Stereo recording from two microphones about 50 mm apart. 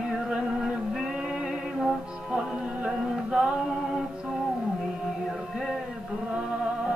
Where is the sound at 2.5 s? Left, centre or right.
Centre.